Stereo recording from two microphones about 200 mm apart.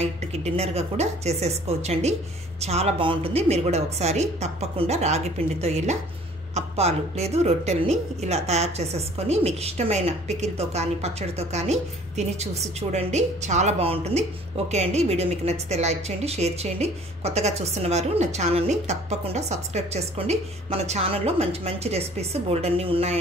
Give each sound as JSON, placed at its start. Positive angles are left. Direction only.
{"t": 0.0, "sound": "a woman's voice", "side_deg": -30}